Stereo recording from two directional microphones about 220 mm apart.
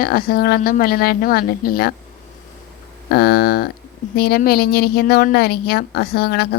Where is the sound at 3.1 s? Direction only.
45° left (ahead or behind).